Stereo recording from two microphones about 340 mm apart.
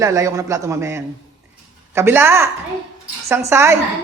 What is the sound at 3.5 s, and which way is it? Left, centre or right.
Speech, centre.